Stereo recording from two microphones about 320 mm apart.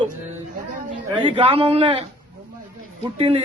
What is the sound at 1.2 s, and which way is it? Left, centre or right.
Speech, centre.